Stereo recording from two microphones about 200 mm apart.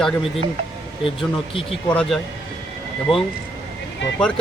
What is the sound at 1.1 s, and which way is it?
Speech, 25° left (ahead or behind).